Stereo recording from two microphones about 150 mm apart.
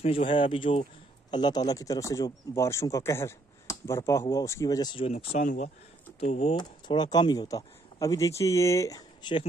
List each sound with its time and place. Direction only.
0.3 s speech: 35° left (ahead or behind)
5.0 s speech: 40° left (ahead or behind)
5.4 s speech: 60° left (ahead or behind)
6.1 s speech: 45° left (ahead or behind)
6.5 s speech: 30° left (ahead or behind)